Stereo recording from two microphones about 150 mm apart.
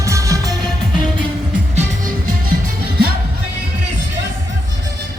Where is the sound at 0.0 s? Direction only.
20° right (ahead or behind).